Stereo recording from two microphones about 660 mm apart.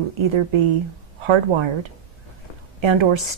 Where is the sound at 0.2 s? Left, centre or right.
Right.